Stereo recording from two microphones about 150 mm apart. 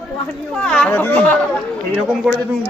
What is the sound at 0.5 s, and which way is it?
Speech, 5° left (ahead or behind).